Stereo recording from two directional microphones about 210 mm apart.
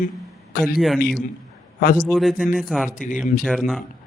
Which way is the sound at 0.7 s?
Centre (ahead or behind).